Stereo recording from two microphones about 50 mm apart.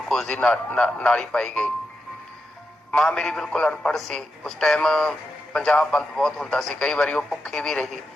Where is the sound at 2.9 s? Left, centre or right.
Centre.